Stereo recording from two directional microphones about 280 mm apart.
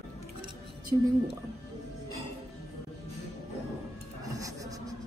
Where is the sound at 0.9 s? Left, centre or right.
Centre.